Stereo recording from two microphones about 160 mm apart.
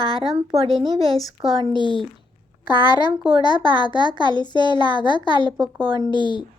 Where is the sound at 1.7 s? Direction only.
30° left (ahead or behind).